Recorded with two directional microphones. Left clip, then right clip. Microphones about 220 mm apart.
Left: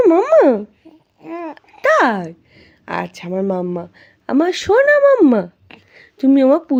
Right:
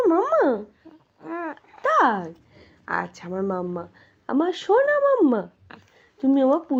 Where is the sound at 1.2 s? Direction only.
20° left (ahead or behind).